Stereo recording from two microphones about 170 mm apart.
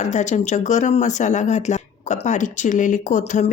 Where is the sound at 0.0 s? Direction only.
45° left (ahead or behind).